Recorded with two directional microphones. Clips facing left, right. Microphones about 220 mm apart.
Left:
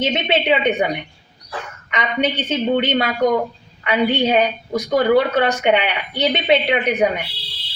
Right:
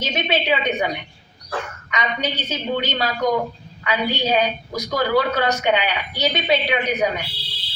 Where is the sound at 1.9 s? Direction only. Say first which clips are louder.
Left 5 dB; 30° left (ahead or behind).